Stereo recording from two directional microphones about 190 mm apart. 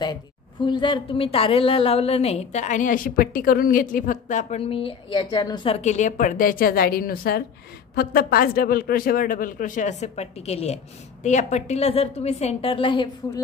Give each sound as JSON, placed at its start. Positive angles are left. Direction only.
{"t": 0.7, "sound": "a woman's voice", "side_deg": 25}